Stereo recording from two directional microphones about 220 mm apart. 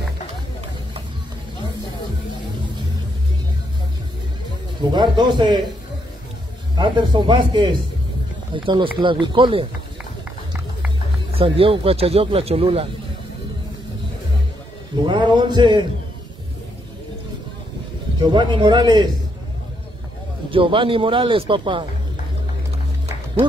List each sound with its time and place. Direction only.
4.9 s speech: 20° right (ahead or behind)
6.8 s speech: 20° right (ahead or behind)
11.3 s speech: 25° right (ahead or behind)
15.0 s speech: 20° right (ahead or behind)
18.2 s speech: 20° right (ahead or behind)
20.4 s speech: 25° right (ahead or behind)